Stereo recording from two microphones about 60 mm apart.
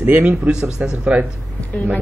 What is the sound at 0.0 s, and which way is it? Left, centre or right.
Speech, right.